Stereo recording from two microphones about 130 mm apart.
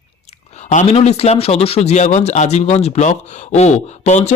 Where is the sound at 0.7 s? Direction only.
65° left (ahead or behind).